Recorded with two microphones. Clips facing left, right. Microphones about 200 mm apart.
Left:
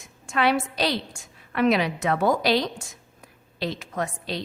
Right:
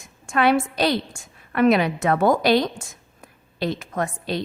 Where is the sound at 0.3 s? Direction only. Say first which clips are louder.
Right 4 dB; 50° right (ahead or behind).